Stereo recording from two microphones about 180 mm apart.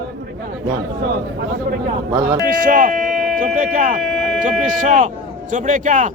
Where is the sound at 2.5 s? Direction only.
50° right (ahead or behind).